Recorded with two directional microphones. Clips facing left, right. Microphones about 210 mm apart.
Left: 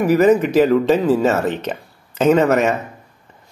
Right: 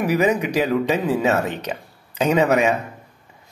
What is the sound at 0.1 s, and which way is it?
Speech, 15° right (ahead or behind).